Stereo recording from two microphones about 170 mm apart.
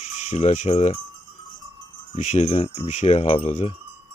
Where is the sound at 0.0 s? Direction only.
45° left (ahead or behind).